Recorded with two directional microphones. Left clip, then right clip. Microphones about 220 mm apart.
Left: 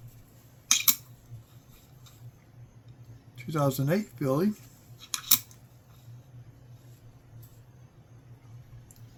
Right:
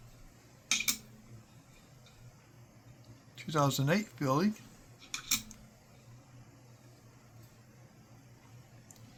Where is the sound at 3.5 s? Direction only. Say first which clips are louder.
Left 2 dB; 30° right (ahead or behind).